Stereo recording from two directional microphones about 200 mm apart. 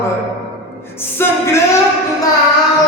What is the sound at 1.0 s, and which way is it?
Music, 10° left (ahead or behind).